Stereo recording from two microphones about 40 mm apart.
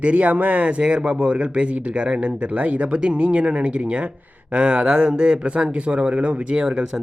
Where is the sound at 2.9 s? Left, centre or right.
Right.